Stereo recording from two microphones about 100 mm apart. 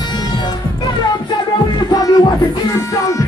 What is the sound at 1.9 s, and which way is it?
Music, 35° left (ahead or behind).